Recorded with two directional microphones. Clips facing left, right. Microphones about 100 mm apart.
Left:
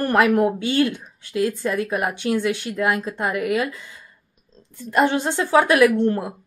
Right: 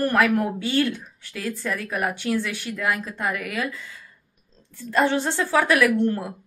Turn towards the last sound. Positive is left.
turn(degrees=25)  # may be behind; listen again after turning